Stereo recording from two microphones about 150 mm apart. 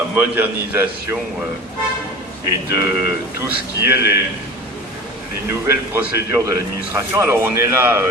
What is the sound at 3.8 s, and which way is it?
Speech, 15° right (ahead or behind).